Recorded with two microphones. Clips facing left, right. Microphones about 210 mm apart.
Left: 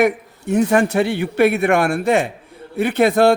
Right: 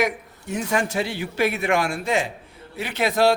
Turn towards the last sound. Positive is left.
turn(degrees=55)  # may be behind; listen again after turning